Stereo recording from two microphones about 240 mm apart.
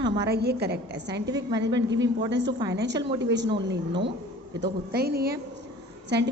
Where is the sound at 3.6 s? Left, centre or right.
Right.